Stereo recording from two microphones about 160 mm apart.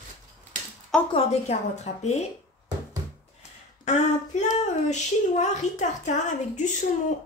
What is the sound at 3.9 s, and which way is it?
A woman's voice, 45° left (ahead or behind).